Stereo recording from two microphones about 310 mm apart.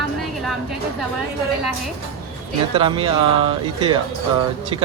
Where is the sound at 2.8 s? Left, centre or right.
Centre.